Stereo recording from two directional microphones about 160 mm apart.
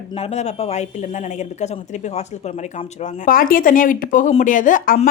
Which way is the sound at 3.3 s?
60° left (ahead or behind).